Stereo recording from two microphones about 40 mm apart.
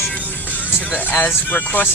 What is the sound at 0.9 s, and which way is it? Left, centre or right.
Speech, left.